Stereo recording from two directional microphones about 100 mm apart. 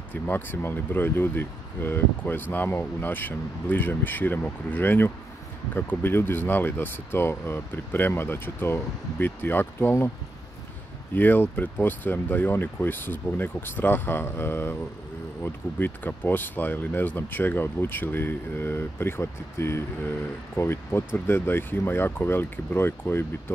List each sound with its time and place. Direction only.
0.1 s speech: 20° left (ahead or behind)
11.1 s speech: 20° left (ahead or behind)